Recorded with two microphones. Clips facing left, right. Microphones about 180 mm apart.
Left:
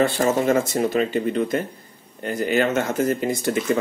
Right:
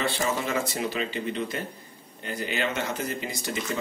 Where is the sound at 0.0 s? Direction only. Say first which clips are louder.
Left 9 dB; 45° left (ahead or behind).